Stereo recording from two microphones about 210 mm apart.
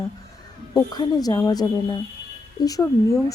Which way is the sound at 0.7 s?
20° left (ahead or behind).